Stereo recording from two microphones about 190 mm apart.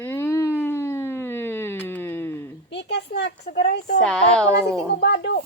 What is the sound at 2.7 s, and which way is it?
A woman's voice, 65° left (ahead or behind).